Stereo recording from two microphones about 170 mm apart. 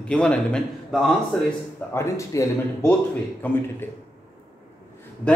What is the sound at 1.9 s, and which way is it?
Speech, 15° left (ahead or behind).